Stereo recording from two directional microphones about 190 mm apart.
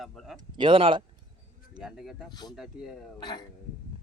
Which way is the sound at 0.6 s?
25° right (ahead or behind).